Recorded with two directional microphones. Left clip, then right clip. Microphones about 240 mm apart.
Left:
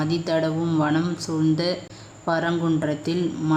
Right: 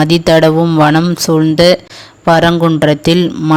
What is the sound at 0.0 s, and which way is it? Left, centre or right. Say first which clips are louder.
Speech: right 15 dB; right.